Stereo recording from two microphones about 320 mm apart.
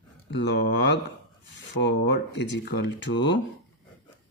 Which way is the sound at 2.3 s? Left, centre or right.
Left.